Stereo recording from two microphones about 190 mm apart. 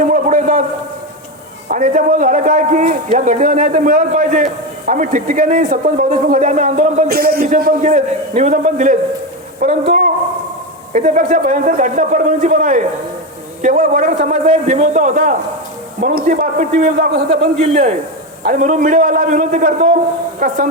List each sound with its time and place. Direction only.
0.0 s a sound: 40° right (ahead or behind)
1.6 s a man's voice: 45° right (ahead or behind)
7.1 s a man's voice: 55° right (ahead or behind)